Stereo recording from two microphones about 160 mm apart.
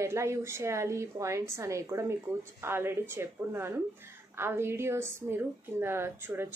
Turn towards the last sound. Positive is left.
turn(degrees=-15)  # may be behind; listen again after turning